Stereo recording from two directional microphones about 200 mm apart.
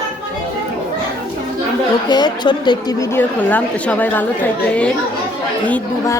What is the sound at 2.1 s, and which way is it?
Speech, 20° left (ahead or behind).